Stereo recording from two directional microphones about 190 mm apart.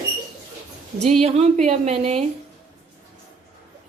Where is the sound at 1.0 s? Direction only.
35° right (ahead or behind).